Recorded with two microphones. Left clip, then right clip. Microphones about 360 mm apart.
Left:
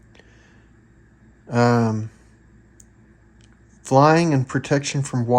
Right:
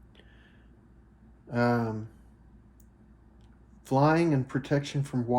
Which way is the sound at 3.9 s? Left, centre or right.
Left.